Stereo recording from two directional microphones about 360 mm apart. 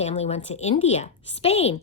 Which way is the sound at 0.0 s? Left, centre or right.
Centre.